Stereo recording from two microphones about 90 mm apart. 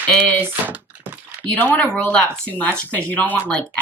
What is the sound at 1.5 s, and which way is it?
A woman's voice, 20° left (ahead or behind).